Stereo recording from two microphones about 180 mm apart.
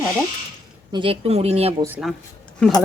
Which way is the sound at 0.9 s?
30° right (ahead or behind).